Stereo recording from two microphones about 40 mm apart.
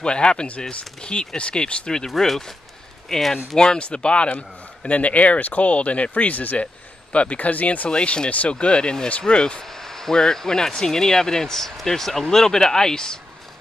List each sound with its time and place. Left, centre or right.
0.0 s speech: left
2.0 s a man's voice: centre; by 7.9 s left
7.9 s speech: left
9.7 s speech: centre